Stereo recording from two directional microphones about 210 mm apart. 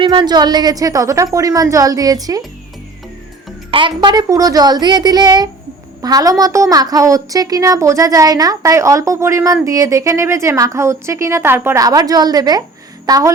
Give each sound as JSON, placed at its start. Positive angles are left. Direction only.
{"t": 0.0, "sound": "a woman's voice", "side_deg": -20}
{"t": 3.7, "sound": "a woman's voice", "side_deg": -25}